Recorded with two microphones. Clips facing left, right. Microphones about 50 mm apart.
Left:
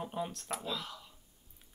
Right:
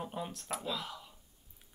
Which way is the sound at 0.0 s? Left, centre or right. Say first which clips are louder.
Left 2 dB; centre.